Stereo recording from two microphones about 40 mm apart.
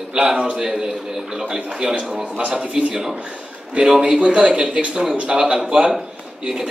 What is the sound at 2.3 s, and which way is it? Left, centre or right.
Speech, right.